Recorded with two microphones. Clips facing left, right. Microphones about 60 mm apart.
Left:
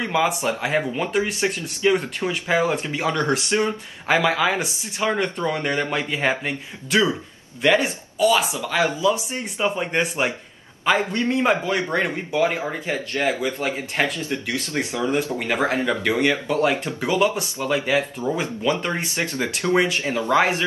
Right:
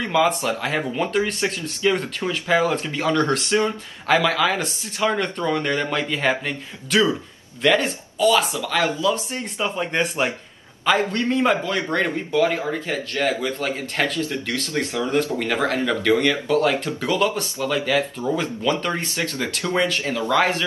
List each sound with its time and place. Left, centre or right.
0.4 s speech: centre
17.6 s speech: left
17.8 s speech: centre
20.0 s speech: left